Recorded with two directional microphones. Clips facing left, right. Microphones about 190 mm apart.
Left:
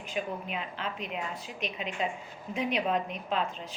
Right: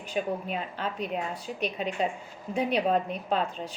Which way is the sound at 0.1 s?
35° right (ahead or behind).